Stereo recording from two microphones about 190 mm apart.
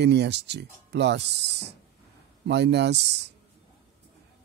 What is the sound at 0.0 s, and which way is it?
Speech, 65° right (ahead or behind).